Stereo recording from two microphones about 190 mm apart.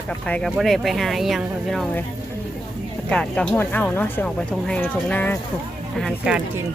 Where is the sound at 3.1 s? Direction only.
5° left (ahead or behind).